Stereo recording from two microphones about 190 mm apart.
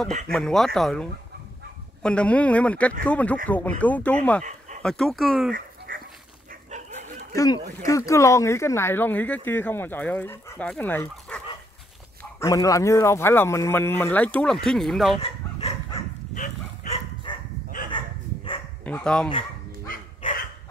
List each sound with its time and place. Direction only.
0.3 s speech: 5° left (ahead or behind)
2.0 s a man's voice: 5° left (ahead or behind)
5.5 s dog: 50° right (ahead or behind)
7.3 s a man's voice: 20° left (ahead or behind); by 15.1 s centre (ahead or behind)
15.1 s dog: 30° left (ahead or behind)
18.9 s a man's voice: 5° left (ahead or behind)
19.9 s dog: 40° left (ahead or behind)